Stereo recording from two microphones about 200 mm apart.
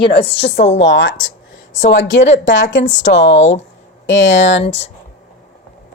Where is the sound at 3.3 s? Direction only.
35° left (ahead or behind).